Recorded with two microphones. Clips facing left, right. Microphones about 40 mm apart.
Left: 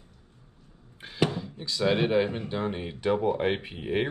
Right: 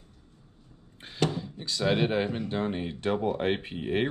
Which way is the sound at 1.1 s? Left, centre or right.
Centre.